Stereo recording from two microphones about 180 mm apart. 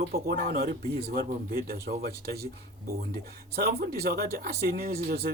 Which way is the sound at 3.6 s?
60° right (ahead or behind).